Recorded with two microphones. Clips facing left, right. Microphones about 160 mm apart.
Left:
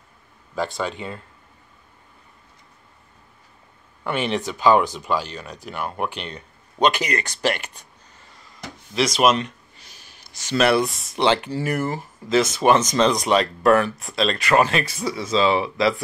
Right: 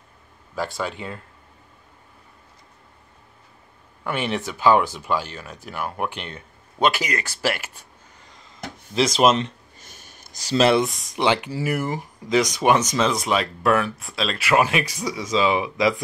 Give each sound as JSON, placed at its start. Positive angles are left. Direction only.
{"t": 0.6, "sound": "speech", "side_deg": -5}
{"t": 4.0, "sound": "speech", "side_deg": -10}
{"t": 8.3, "sound": "a sound", "side_deg": -20}
{"t": 8.9, "sound": "speech", "side_deg": -30}
{"t": 9.8, "sound": "sniff", "side_deg": -50}
{"t": 10.5, "sound": "speech", "side_deg": -25}